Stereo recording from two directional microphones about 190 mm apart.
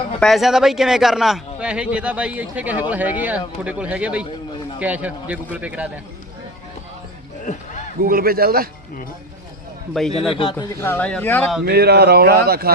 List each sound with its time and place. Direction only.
0.2 s speech: centre (ahead or behind)
8.0 s a man's voice: 50° right (ahead or behind)
10.0 s speech: centre (ahead or behind)
10.3 s speech: 25° left (ahead or behind)
10.8 s speech: 10° left (ahead or behind)
11.6 s speech: 60° right (ahead or behind)